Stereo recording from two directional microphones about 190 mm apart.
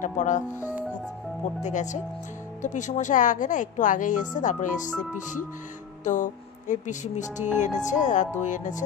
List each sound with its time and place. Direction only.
0.0 s speech: 40° left (ahead or behind)
1.6 s speech: 40° left (ahead or behind)
6.0 s speech: 40° left (ahead or behind)